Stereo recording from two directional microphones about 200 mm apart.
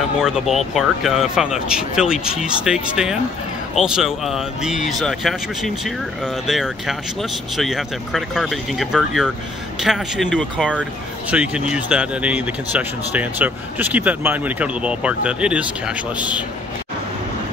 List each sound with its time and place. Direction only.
0.2 s speech: centre (ahead or behind)